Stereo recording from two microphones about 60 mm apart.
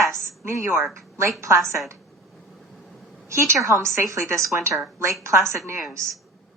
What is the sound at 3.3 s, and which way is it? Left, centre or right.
A woman's voice, right.